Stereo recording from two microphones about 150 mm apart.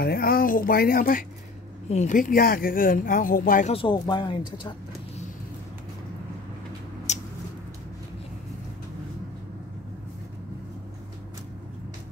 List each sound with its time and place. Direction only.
0.0 s speech: 85° left; by 1.2 s 70° left (ahead or behind)
1.9 s speech: 50° left (ahead or behind)
3.7 s speech: 35° left (ahead or behind)
7.1 s a sound: 50° left (ahead or behind)